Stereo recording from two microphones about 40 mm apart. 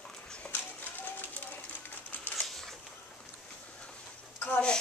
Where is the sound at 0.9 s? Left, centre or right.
Left.